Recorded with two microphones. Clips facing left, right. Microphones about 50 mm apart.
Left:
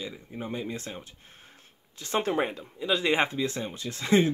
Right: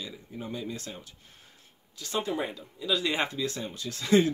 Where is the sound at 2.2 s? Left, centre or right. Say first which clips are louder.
Left 4 dB; left.